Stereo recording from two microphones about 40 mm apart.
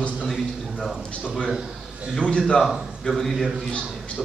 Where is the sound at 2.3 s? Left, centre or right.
Left.